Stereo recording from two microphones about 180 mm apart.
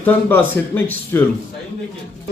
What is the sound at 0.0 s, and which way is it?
A man's voice, 10° left (ahead or behind).